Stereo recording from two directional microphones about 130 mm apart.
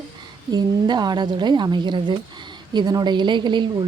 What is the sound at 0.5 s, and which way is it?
A woman's voice, 35° right (ahead or behind).